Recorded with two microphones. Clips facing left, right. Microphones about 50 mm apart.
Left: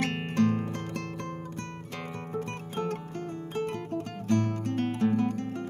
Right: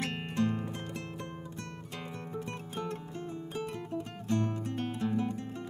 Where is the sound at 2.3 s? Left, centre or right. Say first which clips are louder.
Left 6 dB; left.